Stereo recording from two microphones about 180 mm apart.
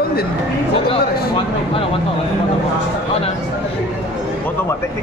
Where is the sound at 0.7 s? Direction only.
30° left (ahead or behind).